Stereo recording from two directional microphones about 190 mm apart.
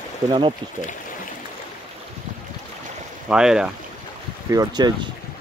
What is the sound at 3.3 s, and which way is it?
Speech, 5° right (ahead or behind).